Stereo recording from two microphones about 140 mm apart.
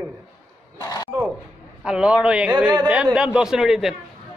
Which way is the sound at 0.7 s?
25° left (ahead or behind).